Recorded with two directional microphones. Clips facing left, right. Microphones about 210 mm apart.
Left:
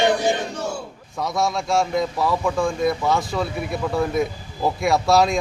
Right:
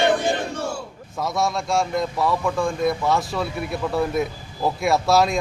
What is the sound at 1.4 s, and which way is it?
Speech, centre (ahead or behind).